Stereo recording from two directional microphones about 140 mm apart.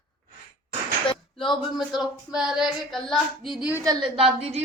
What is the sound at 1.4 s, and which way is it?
Child singing, centre (ahead or behind).